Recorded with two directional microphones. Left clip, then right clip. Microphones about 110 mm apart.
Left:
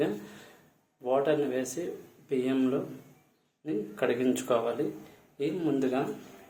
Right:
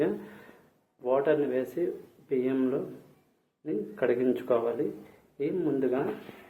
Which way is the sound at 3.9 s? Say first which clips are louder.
Right 2 dB; 15° left (ahead or behind).